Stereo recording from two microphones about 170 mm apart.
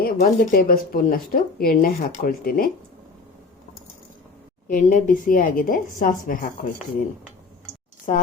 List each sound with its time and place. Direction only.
0.0 s speech: 60° left (ahead or behind)
4.7 s a woman's voice: 50° left (ahead or behind)
8.1 s a woman's voice: 45° left (ahead or behind)